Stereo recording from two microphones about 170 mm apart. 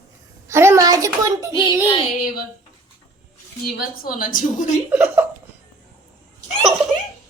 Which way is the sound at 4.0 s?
55° left (ahead or behind).